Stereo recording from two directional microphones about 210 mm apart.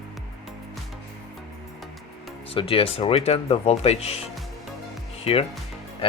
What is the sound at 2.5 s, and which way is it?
Speech, 25° left (ahead or behind).